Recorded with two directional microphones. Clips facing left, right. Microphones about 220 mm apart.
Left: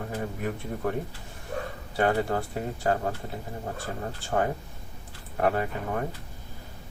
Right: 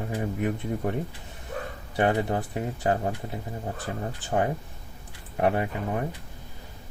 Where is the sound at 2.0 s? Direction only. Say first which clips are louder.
Right 1 dB; 20° right (ahead or behind).